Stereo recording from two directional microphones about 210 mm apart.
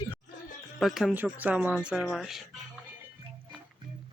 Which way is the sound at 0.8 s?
Centre (ahead or behind).